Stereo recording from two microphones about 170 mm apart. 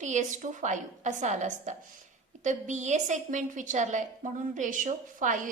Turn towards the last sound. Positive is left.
turn(degrees=-50)  # may be behind; listen again after turning